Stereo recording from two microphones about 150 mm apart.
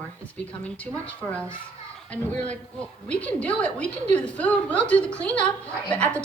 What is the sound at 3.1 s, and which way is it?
A woman's voice, 10° left (ahead or behind).